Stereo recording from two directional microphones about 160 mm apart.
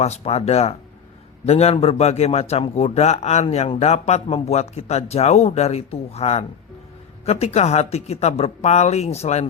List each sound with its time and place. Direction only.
0.0 s a man's voice: 40° left (ahead or behind)